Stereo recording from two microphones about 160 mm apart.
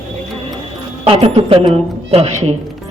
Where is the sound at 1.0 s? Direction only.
35° right (ahead or behind).